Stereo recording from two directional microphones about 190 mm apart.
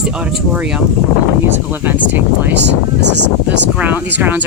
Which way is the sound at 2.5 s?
65° right (ahead or behind).